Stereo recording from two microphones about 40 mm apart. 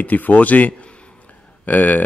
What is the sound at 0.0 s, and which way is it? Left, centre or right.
Speech, left.